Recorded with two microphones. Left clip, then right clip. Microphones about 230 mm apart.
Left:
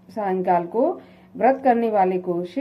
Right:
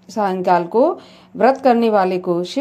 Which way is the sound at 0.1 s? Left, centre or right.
Right.